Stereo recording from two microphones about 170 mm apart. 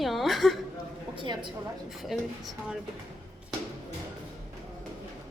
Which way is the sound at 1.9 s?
Centre (ahead or behind).